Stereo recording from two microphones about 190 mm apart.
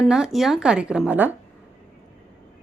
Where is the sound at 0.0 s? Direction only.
Centre (ahead or behind).